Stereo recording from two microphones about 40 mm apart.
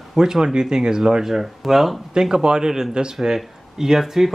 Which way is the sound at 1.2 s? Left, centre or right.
Centre.